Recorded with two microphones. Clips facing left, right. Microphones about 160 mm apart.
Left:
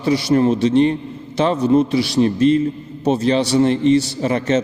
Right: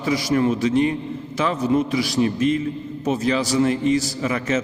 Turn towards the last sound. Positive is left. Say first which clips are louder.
# left 5 dB
turn(degrees=30)  # may be behind; listen again after turning